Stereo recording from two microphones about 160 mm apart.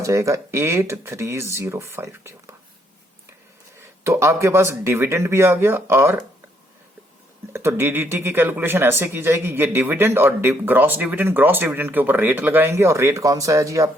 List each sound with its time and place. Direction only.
0.0 s speech: 20° right (ahead or behind)
4.0 s speech: 15° right (ahead or behind)
7.5 s speech: 15° right (ahead or behind)